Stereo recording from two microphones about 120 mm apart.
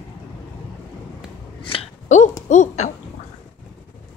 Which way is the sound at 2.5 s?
90° left.